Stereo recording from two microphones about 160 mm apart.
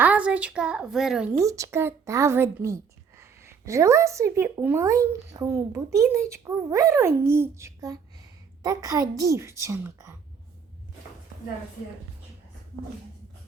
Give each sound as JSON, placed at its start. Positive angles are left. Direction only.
{"t": 0.0, "sound": "a woman's voice", "side_deg": -10}
{"t": 1.3, "sound": "a woman's voice", "side_deg": -20}